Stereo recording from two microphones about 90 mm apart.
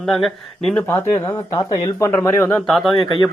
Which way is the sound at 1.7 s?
45° left (ahead or behind).